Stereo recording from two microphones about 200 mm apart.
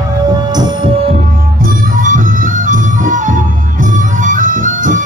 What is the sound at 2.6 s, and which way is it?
Music, 40° right (ahead or behind).